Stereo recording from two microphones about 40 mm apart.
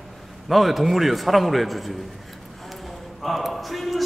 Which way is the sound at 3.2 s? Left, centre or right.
Centre.